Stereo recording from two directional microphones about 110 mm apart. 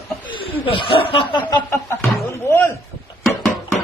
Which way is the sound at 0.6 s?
50° left (ahead or behind).